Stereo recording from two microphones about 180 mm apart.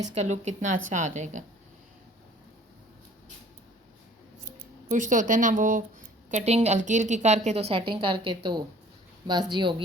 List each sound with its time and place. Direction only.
0.0 s a woman's voice: 40° right (ahead or behind)
4.9 s speech: 45° right (ahead or behind)
6.3 s a woman's voice: 35° right (ahead or behind)